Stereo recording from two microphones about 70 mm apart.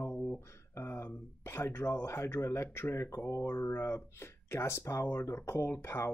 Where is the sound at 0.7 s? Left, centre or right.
Left.